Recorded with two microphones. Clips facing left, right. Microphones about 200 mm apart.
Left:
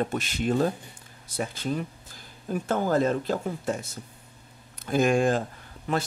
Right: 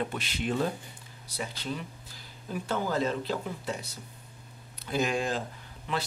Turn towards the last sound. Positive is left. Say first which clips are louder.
# left 5 dB
turn(degrees=45)  # may be behind; listen again after turning